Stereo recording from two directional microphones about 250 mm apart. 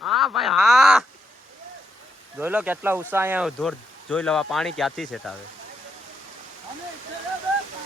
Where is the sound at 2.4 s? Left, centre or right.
Centre.